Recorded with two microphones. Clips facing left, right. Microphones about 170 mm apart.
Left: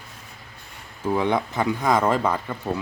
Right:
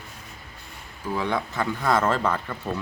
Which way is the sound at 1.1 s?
20° left (ahead or behind).